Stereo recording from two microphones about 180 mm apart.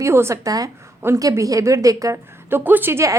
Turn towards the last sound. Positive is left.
turn(degrees=-15)  # may be behind; listen again after turning